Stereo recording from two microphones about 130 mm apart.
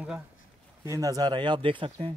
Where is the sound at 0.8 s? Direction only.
25° right (ahead or behind); by 2.1 s 40° right (ahead or behind).